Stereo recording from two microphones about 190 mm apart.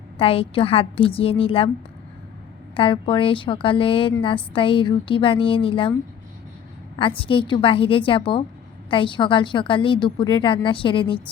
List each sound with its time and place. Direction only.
0.2 s a woman's voice: 30° left (ahead or behind)
2.7 s a woman's voice: 25° left (ahead or behind)
7.3 s a woman's voice: 25° left (ahead or behind)